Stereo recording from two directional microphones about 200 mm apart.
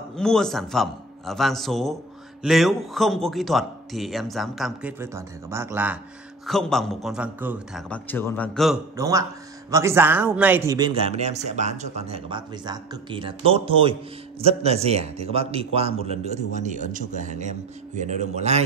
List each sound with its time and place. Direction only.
0.1 s speech: 5° left (ahead or behind)
5.0 s speech: 15° right (ahead or behind)
6.4 s speech: centre (ahead or behind)
7.9 s a man's voice: 10° left (ahead or behind)
8.9 s a man's voice: 15° right (ahead or behind); by 18.6 s 35° right (ahead or behind)